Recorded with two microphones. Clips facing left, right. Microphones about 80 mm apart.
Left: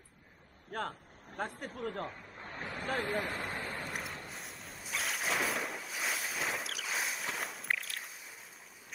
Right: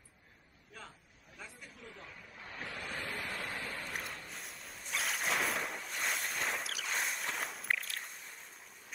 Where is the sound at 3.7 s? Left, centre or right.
Centre.